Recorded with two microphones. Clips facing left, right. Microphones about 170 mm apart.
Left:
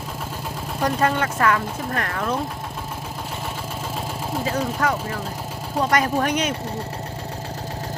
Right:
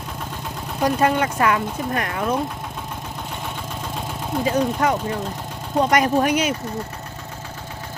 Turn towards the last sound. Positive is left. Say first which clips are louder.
# right 3 dB
turn(degrees=-10)  # may be behind; listen again after turning